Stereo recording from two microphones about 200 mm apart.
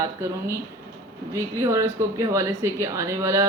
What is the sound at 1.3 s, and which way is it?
Speech, 15° right (ahead or behind).